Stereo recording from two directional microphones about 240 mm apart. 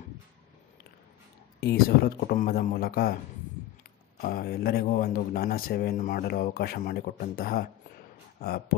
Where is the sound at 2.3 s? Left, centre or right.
Left.